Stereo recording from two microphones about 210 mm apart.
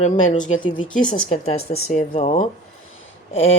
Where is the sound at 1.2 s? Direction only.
30° left (ahead or behind).